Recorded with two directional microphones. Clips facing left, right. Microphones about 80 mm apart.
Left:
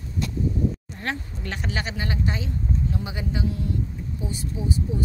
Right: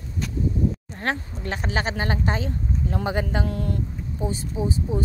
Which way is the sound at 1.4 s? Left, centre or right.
Right.